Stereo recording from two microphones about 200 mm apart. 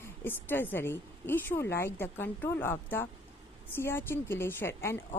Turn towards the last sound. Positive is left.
turn(degrees=10)  # may be behind; listen again after turning